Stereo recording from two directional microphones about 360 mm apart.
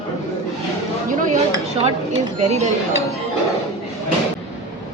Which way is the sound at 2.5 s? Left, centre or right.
Centre.